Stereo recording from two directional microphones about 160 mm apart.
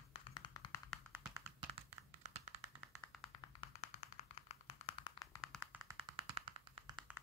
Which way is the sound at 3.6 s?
40° left (ahead or behind).